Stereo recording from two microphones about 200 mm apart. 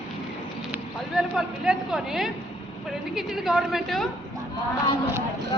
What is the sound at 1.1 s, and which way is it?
Speech, 5° right (ahead or behind).